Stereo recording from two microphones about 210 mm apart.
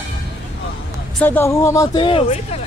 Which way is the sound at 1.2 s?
10° left (ahead or behind).